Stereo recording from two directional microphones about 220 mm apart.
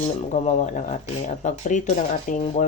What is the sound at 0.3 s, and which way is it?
Speech, 30° left (ahead or behind).